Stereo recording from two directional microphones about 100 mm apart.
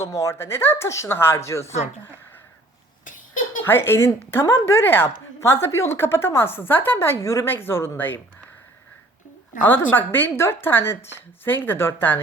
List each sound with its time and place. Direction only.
0.0 s speech: 30° left (ahead or behind)
3.6 s speech: 25° left (ahead or behind)
9.6 s speech: 20° left (ahead or behind)